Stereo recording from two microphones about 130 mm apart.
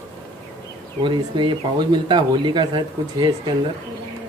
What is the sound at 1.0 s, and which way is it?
Speech, 40° right (ahead or behind).